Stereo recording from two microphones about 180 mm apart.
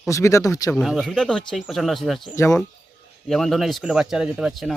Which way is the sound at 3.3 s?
Centre (ahead or behind).